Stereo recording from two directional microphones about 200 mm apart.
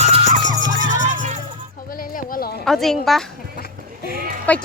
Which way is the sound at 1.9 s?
45° left (ahead or behind).